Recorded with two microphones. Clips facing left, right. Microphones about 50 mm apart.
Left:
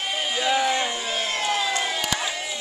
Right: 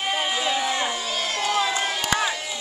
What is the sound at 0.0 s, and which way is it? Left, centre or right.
Run, centre.